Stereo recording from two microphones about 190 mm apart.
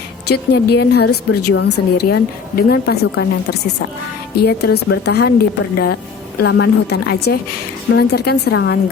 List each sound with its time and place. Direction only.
0.3 s a woman's voice: 60° left (ahead or behind)